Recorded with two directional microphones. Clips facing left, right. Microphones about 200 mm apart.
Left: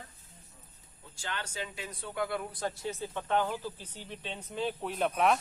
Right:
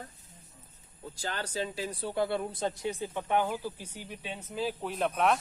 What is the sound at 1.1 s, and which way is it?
A man's voice, 40° right (ahead or behind).